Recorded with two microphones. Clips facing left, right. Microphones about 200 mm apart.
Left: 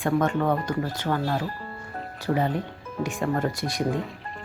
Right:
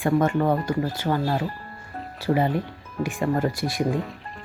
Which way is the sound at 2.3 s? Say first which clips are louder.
Right 3 dB; 15° right (ahead or behind).